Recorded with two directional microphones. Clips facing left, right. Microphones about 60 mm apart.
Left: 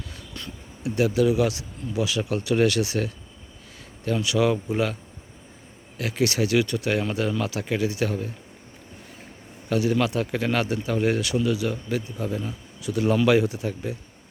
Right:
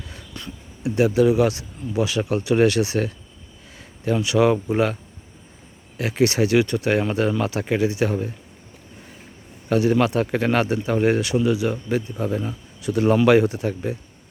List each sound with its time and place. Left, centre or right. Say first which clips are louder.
0.8 s speech: right 4 dB; right
4.2 s speech: right 4 dB; right
6.0 s speech: right 4 dB; right
9.6 s speech: right 4 dB; right